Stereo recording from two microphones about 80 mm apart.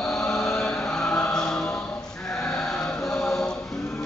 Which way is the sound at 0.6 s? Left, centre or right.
Centre.